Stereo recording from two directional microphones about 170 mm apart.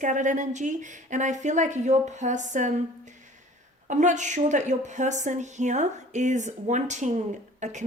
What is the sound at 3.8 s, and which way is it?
Speech, 45° right (ahead or behind).